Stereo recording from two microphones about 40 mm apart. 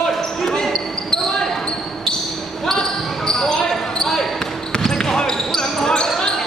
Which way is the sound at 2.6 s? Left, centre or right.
Centre.